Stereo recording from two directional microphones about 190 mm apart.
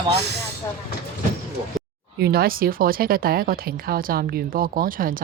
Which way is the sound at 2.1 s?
55° right (ahead or behind).